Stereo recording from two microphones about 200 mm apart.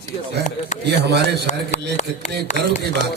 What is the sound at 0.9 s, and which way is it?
Speech, 55° right (ahead or behind).